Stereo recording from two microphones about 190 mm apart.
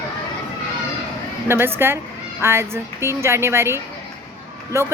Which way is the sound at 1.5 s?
10° right (ahead or behind).